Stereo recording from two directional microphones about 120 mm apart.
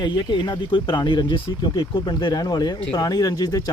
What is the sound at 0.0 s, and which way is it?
Speech, 40° left (ahead or behind).